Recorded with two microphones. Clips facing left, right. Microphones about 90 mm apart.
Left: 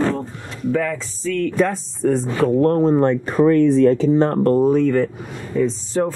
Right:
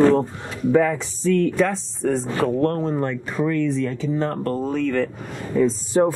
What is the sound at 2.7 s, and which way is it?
Speech, 20° left (ahead or behind).